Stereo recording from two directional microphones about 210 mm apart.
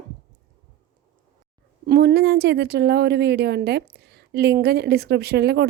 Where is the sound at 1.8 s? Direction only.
50° right (ahead or behind).